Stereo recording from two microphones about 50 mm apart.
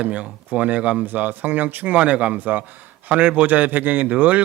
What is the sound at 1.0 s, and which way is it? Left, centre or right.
A man's voice, right.